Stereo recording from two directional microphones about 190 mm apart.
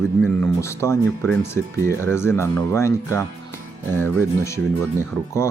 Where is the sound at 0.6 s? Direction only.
15° left (ahead or behind).